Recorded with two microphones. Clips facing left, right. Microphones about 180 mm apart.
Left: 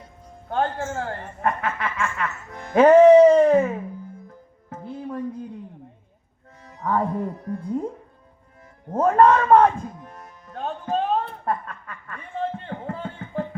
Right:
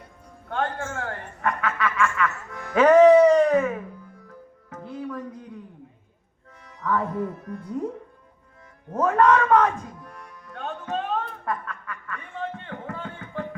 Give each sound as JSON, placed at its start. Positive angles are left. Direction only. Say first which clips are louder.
{"t": 0.4, "sound": "a sound", "louder": "left 3 dB", "side_deg": 30}
{"t": 3.2, "sound": "wail", "louder": "left 3 dB", "side_deg": 25}
{"t": 4.3, "sound": "music", "louder": "left 2 dB", "side_deg": 25}
{"t": 6.7, "sound": "speech", "louder": "left 2 dB", "side_deg": 35}
{"t": 8.9, "sound": "speech", "louder": "left 3 dB", "side_deg": 30}
{"t": 10.0, "sound": "music", "louder": "left 1 dB", "side_deg": 25}
{"t": 11.4, "sound": "a sound", "louder": "left 3 dB", "side_deg": 30}